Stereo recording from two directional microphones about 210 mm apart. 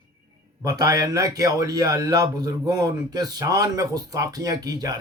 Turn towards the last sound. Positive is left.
turn(degrees=-15)  # may be behind; listen again after turning